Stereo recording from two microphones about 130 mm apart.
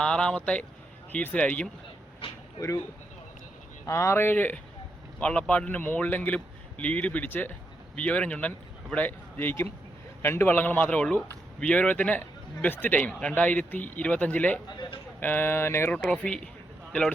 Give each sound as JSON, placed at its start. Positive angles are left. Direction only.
{"t": 0.0, "sound": "a man's voice", "side_deg": 5}
{"t": 2.6, "sound": "speech", "side_deg": 25}
{"t": 3.8, "sound": "a man's voice", "side_deg": 20}